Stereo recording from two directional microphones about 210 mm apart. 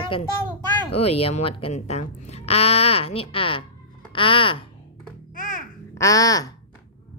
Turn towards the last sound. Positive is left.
turn(degrees=15)  # may be behind; listen again after turning